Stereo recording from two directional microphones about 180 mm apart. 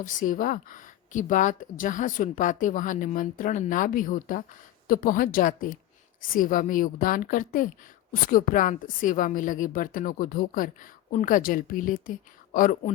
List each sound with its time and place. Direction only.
0.0 s speech: 45° left (ahead or behind)